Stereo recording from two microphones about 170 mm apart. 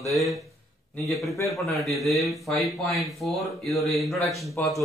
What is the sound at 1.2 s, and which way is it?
Speech, 20° left (ahead or behind).